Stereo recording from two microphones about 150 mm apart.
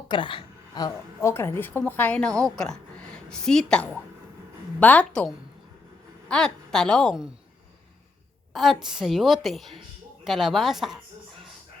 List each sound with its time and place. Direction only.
0.1 s a woman's voice: 35° left (ahead or behind); by 7.3 s centre (ahead or behind)
8.5 s a woman's voice: centre (ahead or behind)